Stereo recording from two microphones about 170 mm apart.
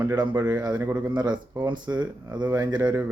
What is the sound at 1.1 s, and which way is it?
Speech, 25° right (ahead or behind).